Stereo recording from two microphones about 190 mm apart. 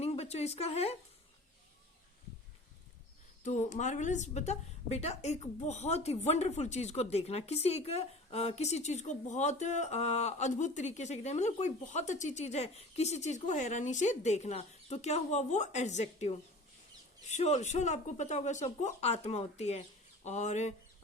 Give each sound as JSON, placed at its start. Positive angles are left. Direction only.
{"t": 0.0, "sound": "a woman's voice", "side_deg": 35}
{"t": 3.4, "sound": "a woman's voice", "side_deg": 40}